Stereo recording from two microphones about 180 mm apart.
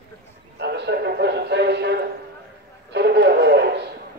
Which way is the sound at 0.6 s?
70° right (ahead or behind).